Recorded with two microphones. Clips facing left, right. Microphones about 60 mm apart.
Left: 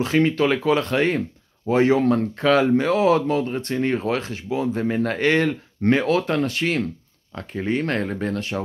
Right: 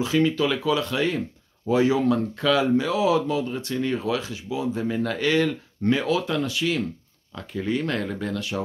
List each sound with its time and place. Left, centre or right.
0.0 s speech: left